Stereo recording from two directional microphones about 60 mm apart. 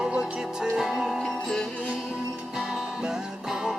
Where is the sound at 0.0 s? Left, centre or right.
Centre.